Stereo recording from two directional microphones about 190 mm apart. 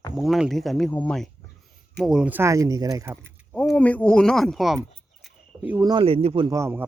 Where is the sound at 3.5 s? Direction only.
5° left (ahead or behind); by 6.4 s 30° right (ahead or behind).